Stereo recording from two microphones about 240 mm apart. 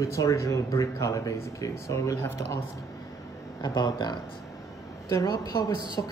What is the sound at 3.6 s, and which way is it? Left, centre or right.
Speech, centre.